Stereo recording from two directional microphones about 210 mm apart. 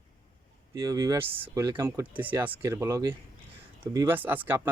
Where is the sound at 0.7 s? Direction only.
15° right (ahead or behind).